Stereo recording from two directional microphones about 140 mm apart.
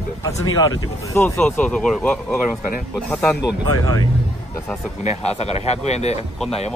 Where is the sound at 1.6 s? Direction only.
5° left (ahead or behind).